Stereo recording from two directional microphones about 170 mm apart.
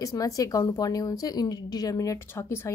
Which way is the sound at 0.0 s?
20° left (ahead or behind).